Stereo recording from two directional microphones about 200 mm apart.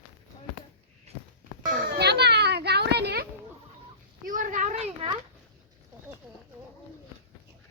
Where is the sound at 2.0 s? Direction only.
55° right (ahead or behind).